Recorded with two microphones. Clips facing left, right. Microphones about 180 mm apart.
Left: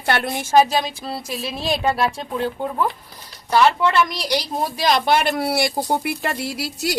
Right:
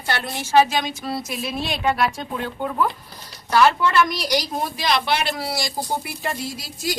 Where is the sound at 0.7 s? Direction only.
35° left (ahead or behind).